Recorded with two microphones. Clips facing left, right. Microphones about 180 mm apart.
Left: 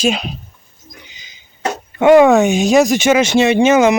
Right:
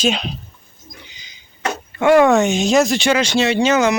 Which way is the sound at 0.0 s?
5° left (ahead or behind).